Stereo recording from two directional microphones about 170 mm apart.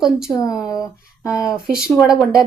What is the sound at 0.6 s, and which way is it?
Speech, 20° left (ahead or behind).